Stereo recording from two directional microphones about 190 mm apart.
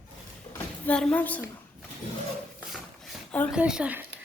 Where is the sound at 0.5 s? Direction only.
5° left (ahead or behind).